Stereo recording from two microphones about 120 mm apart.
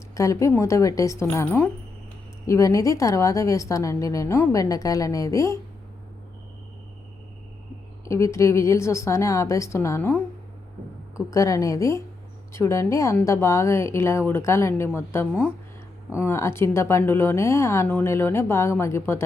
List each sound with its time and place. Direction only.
0.1 s a woman's voice: 25° left (ahead or behind)
2.5 s a woman's voice: 25° left (ahead or behind)
8.0 s a woman's voice: 25° left (ahead or behind)
11.3 s a woman's voice: 25° left (ahead or behind)